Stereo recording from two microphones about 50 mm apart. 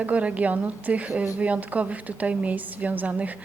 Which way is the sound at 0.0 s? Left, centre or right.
Right.